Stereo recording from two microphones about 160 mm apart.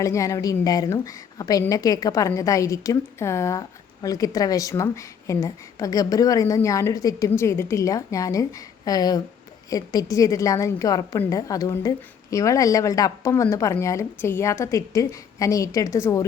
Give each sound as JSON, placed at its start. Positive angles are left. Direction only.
{"t": 0.0, "sound": "a woman's voice", "side_deg": 20}